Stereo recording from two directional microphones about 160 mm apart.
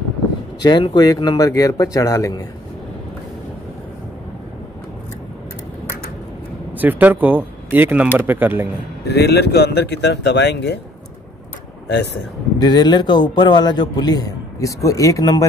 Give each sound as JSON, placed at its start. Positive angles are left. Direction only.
{"t": 0.6, "sound": "a man's voice", "side_deg": 25}
{"t": 6.8, "sound": "speech", "side_deg": -10}
{"t": 9.0, "sound": "speech", "side_deg": 90}
{"t": 11.9, "sound": "speech", "side_deg": 90}
{"t": 12.5, "sound": "a man's voice", "side_deg": 25}